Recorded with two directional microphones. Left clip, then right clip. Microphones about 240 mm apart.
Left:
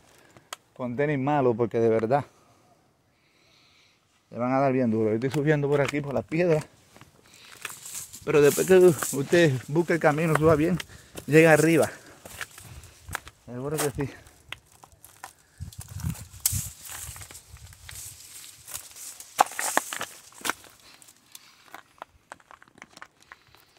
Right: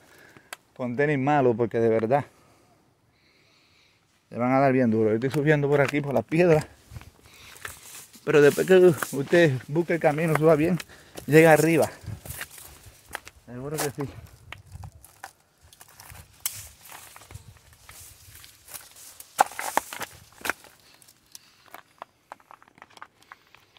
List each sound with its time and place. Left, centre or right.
0.5 s speech: centre
4.3 s speech: centre
5.9 s speech: right
8.2 s speech: centre
9.3 s speech: centre
13.5 s speech: centre
13.7 s speech: centre
17.3 s a sound: centre
19.3 s walk: centre
21.7 s a sound: centre